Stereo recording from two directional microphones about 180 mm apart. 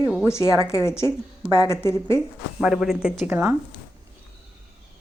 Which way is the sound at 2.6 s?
5° right (ahead or behind).